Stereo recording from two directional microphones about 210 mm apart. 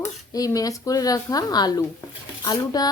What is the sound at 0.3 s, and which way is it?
Speech, 15° left (ahead or behind).